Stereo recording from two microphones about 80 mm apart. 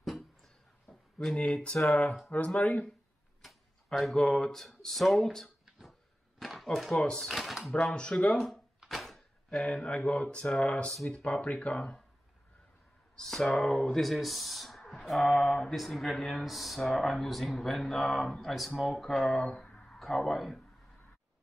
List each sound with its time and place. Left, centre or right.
0.0 s a sound: centre
2.2 s speech: left
3.4 s a sound: centre
6.4 s speech: centre
7.7 s speech: centre
8.5 s a sound: centre
9.6 s speech: centre
10.4 s speech: centre
13.1 s speech: centre